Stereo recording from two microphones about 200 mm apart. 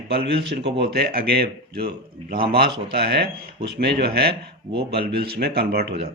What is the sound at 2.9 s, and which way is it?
Speech, 55° right (ahead or behind).